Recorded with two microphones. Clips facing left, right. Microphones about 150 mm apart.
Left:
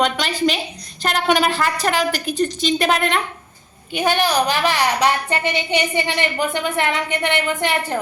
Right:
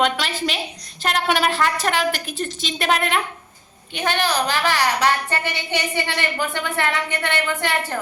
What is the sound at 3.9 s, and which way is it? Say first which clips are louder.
A woman's voice: left 4 dB; 15° left (ahead or behind).